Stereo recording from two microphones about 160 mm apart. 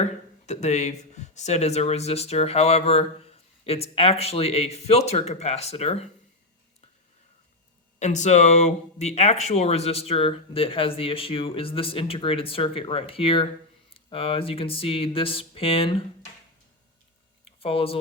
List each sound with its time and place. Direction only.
0.4 s speech: 45° left (ahead or behind)
7.9 s speech: 45° left (ahead or behind)
17.4 s a sound: 35° left (ahead or behind)